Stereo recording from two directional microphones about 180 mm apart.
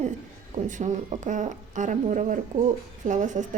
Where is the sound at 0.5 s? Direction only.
40° right (ahead or behind).